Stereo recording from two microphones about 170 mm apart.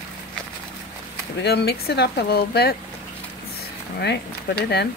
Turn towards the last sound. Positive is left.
turn(degrees=75)  # may be behind; listen again after turning